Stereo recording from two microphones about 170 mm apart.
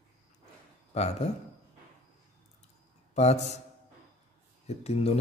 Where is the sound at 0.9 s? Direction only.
40° left (ahead or behind).